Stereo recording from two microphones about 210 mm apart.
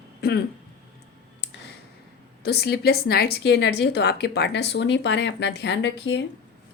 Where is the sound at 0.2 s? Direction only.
50° left (ahead or behind).